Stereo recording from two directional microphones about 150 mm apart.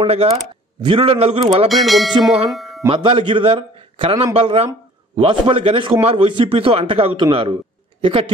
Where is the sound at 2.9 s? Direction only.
35° right (ahead or behind).